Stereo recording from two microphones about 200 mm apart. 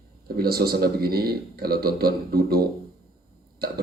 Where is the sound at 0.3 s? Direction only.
50° right (ahead or behind).